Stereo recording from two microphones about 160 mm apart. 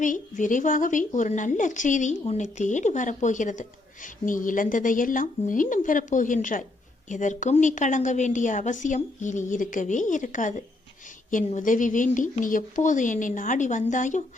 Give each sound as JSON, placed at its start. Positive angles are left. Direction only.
{"t": 0.0, "sound": "a woman's voice", "side_deg": 55}